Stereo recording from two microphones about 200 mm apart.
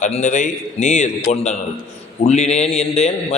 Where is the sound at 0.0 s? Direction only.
35° left (ahead or behind).